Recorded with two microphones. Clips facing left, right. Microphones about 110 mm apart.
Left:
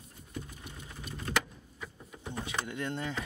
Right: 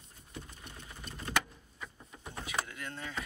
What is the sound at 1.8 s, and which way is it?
Vehicle, 5° left (ahead or behind).